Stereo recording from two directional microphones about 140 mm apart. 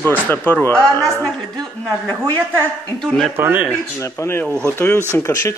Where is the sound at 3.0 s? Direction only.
Centre (ahead or behind).